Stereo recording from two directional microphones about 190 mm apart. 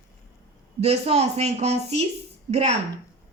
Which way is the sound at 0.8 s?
35° right (ahead or behind).